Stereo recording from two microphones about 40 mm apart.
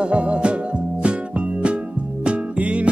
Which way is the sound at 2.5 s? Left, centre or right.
Right.